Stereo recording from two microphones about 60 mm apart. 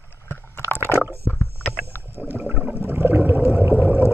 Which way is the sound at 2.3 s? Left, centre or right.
Right.